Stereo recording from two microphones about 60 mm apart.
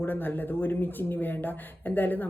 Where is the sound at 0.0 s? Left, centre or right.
Left.